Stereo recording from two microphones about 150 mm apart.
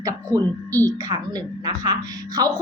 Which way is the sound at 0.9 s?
25° right (ahead or behind).